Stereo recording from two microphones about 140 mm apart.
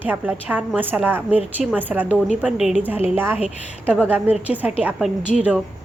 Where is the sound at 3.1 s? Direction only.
15° right (ahead or behind).